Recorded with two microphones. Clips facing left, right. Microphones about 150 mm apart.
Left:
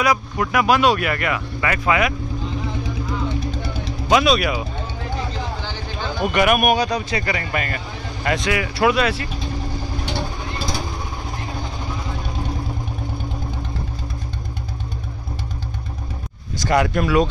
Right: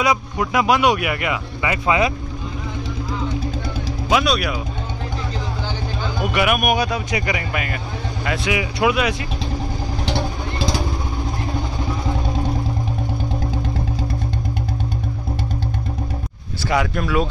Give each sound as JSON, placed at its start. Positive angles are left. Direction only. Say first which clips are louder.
{"t": 0.0, "sound": "speech", "louder": "even", "side_deg": -20}
{"t": 4.1, "sound": "speech", "louder": "left 2 dB", "side_deg": 0}
{"t": 6.3, "sound": "speech", "louder": "left 2 dB", "side_deg": -5}
{"t": 8.5, "sound": "speech", "louder": "even", "side_deg": -15}
{"t": 16.5, "sound": "speech", "louder": "left 2 dB", "side_deg": 0}